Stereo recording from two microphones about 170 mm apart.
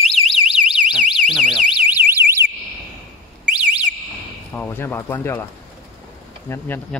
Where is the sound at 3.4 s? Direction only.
5° right (ahead or behind).